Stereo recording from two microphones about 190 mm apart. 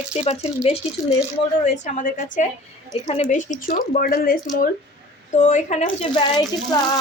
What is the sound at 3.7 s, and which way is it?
Speech, 50° left (ahead or behind).